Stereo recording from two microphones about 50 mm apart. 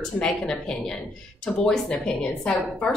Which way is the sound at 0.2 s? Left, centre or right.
Centre.